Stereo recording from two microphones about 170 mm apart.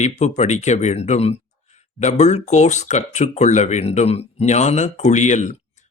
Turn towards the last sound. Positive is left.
turn(degrees=45)  # may be behind; listen again after turning